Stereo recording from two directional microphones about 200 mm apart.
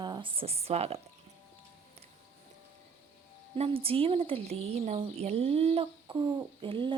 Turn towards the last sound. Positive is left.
turn(degrees=-25)  # may be behind; listen again after turning